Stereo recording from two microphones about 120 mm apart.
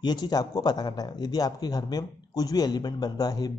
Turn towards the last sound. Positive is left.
turn(degrees=35)  # may be behind; listen again after turning